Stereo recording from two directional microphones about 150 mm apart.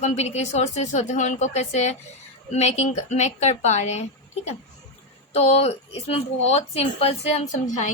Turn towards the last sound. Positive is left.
turn(degrees=55)  # may be behind; listen again after turning